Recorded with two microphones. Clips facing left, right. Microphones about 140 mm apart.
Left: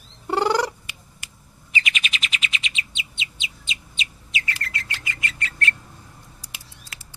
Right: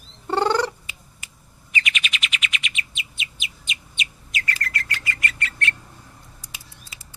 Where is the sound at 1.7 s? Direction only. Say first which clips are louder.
Even; 30° left (ahead or behind).